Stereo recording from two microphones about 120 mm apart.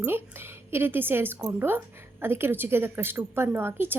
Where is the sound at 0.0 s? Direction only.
20° right (ahead or behind).